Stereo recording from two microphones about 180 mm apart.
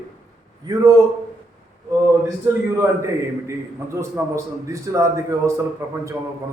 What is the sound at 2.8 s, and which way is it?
A man's voice, 15° right (ahead or behind).